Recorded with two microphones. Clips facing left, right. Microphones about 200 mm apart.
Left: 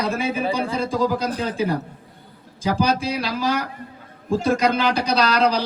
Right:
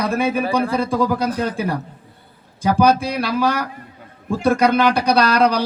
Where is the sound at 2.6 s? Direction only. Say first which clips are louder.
Right 5 dB; 60° right (ahead or behind).